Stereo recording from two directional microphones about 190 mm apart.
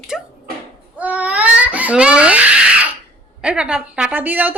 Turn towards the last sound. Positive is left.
turn(degrees=-10)  # may be behind; listen again after turning